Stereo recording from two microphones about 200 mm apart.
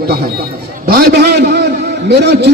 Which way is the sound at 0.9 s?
50° right (ahead or behind).